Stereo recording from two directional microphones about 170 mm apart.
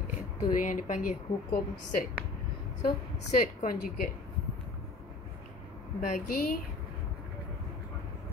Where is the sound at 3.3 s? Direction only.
55° left (ahead or behind).